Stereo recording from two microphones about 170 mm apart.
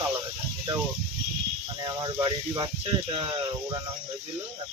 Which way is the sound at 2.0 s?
25° right (ahead or behind).